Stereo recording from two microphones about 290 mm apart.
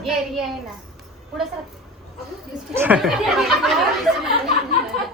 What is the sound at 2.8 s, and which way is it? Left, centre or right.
Speech, centre.